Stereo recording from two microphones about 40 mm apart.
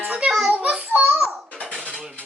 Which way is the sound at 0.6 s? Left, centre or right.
Right.